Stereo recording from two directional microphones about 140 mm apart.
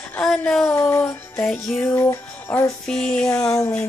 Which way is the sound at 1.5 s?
5° left (ahead or behind).